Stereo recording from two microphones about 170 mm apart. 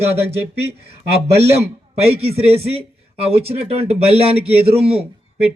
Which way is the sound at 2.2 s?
35° right (ahead or behind).